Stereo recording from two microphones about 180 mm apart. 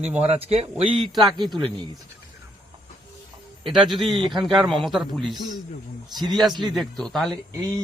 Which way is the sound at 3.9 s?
25° right (ahead or behind).